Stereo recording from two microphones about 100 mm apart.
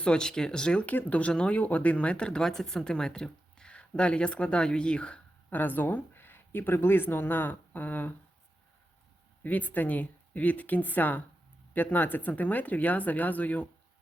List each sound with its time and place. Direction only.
0.0 s speech: 10° left (ahead or behind)
9.4 s speech: 15° left (ahead or behind)